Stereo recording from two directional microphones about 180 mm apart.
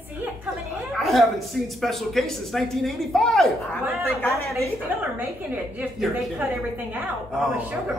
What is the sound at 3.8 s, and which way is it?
Speech, 15° right (ahead or behind).